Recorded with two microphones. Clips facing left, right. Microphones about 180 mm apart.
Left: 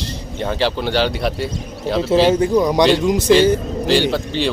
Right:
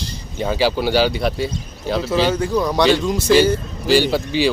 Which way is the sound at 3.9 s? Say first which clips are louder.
Right 1 dB; 5° right (ahead or behind).